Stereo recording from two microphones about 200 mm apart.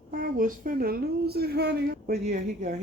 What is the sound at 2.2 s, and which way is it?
Speech, 35° right (ahead or behind).